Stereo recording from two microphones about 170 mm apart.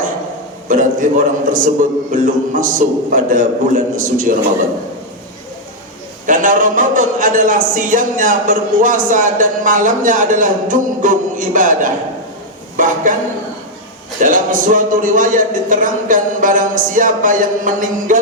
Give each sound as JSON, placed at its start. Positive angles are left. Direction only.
{"t": 0.7, "sound": "a man's voice", "side_deg": -50}
{"t": 6.2, "sound": "a man's voice", "side_deg": -50}
{"t": 14.2, "sound": "a man's voice", "side_deg": -50}